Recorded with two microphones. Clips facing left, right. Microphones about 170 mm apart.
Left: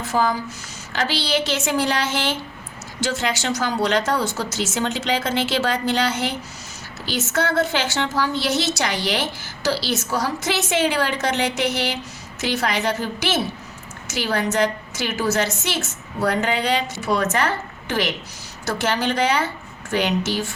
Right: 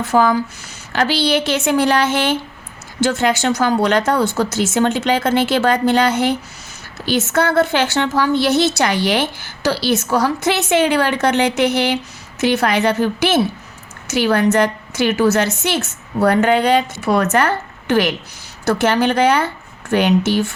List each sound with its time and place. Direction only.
0.1 s a woman's voice: 65° right (ahead or behind)